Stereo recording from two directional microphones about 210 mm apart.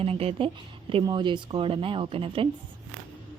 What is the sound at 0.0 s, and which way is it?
Speech, 30° right (ahead or behind).